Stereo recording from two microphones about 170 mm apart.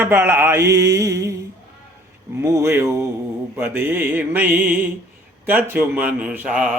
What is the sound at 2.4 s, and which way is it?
Mantra, 15° right (ahead or behind).